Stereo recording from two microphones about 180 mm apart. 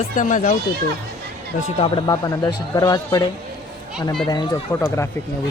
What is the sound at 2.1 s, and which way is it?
Speech, 20° left (ahead or behind).